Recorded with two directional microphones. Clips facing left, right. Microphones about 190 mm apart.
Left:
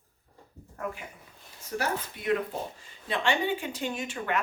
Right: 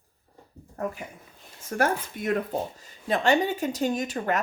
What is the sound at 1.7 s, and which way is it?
Speech, 50° right (ahead or behind).